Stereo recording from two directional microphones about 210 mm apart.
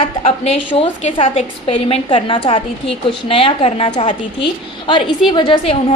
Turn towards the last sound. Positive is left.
turn(degrees=25)  # may be behind; listen again after turning